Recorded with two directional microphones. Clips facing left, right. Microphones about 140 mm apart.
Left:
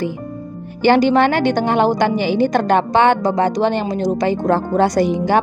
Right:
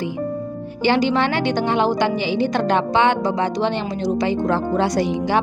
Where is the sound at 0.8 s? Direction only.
50° left (ahead or behind).